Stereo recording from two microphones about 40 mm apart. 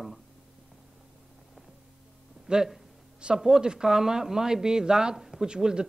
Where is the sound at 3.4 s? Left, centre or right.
Centre.